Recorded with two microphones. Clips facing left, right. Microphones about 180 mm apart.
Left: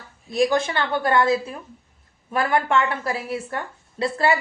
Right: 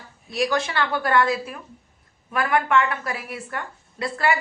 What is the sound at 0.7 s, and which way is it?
A woman's voice, 25° left (ahead or behind).